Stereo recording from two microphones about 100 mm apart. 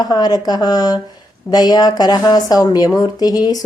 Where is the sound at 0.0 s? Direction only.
45° left (ahead or behind).